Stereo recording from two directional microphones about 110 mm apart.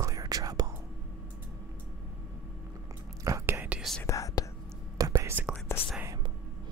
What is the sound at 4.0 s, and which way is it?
Whispering, 30° left (ahead or behind).